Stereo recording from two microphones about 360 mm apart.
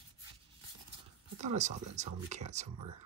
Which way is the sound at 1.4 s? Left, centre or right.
Centre.